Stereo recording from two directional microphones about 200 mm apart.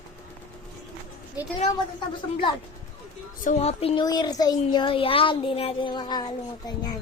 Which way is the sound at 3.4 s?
35° left (ahead or behind).